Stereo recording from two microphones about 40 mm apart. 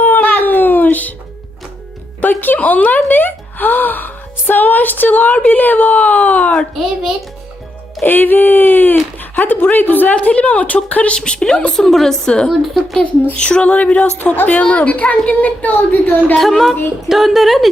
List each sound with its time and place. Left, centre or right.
0.0 s a sound: left
2.2 s speech: left
8.0 s speech: left
10.3 s a sound: left
11.2 s a woman's voice: centre
11.7 s a woman's voice: centre
12.2 s a woman's voice: centre
12.5 s a woman's voice: centre
13.3 s a sound: left
16.4 s a woman's voice: centre